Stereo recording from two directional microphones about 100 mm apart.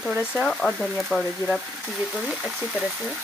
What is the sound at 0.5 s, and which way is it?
Speech, 5° left (ahead or behind).